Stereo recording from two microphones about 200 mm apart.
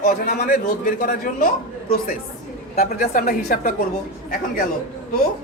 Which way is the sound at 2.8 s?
40° left (ahead or behind).